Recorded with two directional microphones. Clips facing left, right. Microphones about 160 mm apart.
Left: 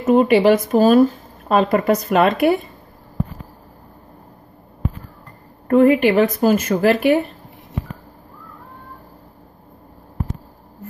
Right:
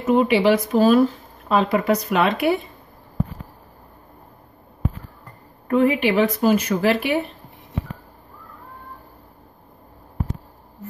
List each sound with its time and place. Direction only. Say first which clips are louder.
0.0 s a woman's voice: left 4 dB; 45° left (ahead or behind)
5.7 s a woman's voice: left 5 dB; 45° left (ahead or behind)